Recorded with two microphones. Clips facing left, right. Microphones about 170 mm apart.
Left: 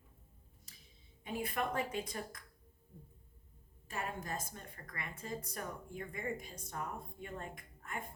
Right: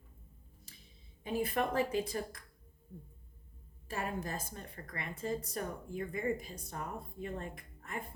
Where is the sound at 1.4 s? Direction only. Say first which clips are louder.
Right 4 dB; 35° right (ahead or behind).